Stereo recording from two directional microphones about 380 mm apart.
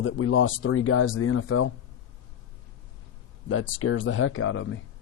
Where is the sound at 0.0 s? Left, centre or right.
Left.